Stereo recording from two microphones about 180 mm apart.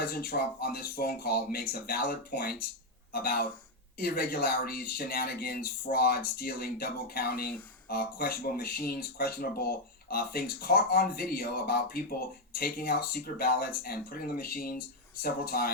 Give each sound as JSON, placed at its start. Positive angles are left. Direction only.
{"t": 0.0, "sound": "speech", "side_deg": 55}